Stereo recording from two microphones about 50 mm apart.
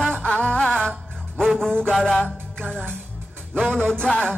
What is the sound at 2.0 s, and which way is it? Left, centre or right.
Music, left.